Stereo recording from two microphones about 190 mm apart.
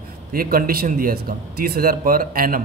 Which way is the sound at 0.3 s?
50° right (ahead or behind).